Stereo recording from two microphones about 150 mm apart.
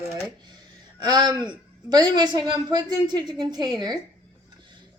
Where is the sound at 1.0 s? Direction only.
25° right (ahead or behind).